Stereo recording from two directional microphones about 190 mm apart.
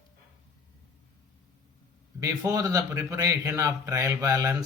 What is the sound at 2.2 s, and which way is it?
Speech, 20° right (ahead or behind).